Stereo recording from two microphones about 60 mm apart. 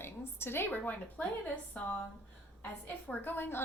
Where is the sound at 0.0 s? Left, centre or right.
Left.